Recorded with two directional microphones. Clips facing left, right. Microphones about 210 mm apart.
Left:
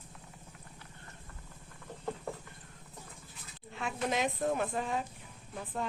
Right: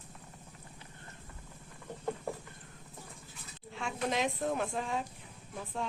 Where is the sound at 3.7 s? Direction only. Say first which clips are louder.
Even; centre (ahead or behind).